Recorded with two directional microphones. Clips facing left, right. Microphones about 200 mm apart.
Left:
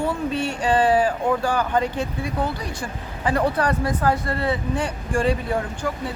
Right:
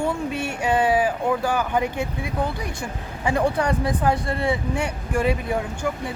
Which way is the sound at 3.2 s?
15° right (ahead or behind).